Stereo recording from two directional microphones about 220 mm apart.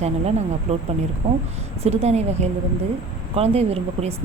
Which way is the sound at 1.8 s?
30° right (ahead or behind).